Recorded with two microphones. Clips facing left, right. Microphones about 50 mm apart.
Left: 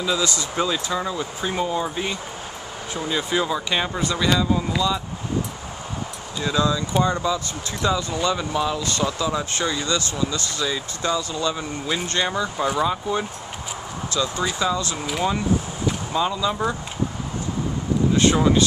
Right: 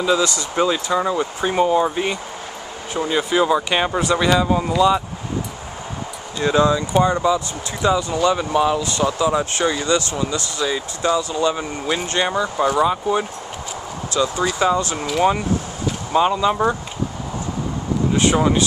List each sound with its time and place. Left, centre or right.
0.2 s speech: right
0.6 s speech: centre
6.4 s speech: right
16.1 s speech: right
18.1 s speech: right